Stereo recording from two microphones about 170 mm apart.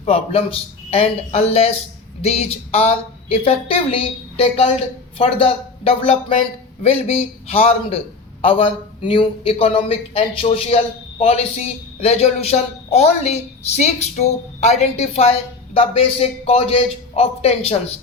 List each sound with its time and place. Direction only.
0.0 s a man's voice: 35° left (ahead or behind)